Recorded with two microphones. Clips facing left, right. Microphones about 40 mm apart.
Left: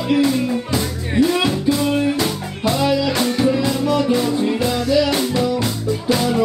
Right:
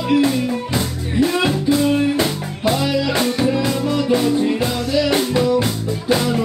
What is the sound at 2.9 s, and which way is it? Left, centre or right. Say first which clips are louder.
Music: left 1 dB; centre.